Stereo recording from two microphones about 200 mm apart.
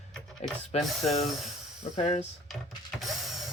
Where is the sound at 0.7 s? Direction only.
30° left (ahead or behind).